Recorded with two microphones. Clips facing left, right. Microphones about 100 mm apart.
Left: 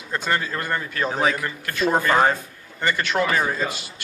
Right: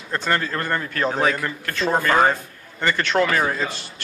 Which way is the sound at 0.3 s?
15° left (ahead or behind).